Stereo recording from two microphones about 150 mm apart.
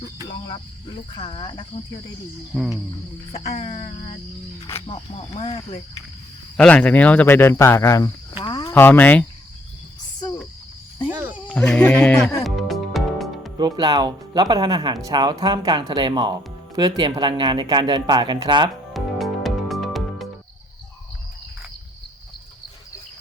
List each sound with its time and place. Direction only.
0.3 s speech: 30° left (ahead or behind)
2.5 s speech: centre (ahead or behind)
4.9 s speech: 40° left (ahead or behind)
6.6 s speech: 10° left (ahead or behind)
8.4 s cricket: 30° left (ahead or behind)
8.7 s speech: 10° left (ahead or behind)
11.1 s cricket: 15° right (ahead or behind)
11.4 s speech: 5° left (ahead or behind)
12.4 s music: centre (ahead or behind)
13.6 s speech: 25° right (ahead or behind)
18.9 s music: centre (ahead or behind)